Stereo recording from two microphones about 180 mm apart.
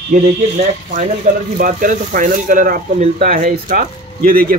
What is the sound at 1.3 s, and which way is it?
Speech, 45° right (ahead or behind).